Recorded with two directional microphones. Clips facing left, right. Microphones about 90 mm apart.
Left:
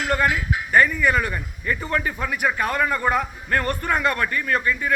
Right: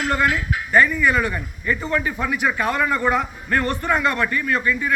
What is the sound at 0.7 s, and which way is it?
A man's voice, 40° left (ahead or behind).